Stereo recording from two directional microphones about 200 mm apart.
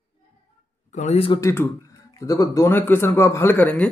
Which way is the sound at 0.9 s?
35° left (ahead or behind).